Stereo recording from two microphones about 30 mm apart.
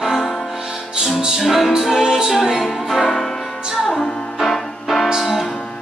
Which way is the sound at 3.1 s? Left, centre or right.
Centre.